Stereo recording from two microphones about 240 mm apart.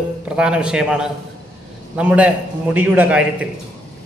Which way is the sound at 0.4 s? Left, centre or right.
Centre.